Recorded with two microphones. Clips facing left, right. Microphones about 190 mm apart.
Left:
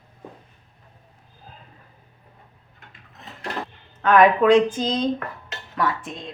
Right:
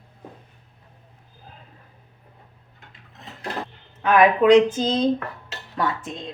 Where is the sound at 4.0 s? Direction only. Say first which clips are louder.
Left 1 dB; 10° right (ahead or behind).